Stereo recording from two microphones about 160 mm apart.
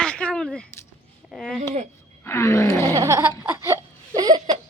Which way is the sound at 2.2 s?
15° left (ahead or behind).